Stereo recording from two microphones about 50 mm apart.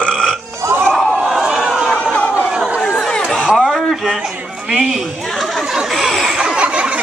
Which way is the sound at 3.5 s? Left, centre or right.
Centre.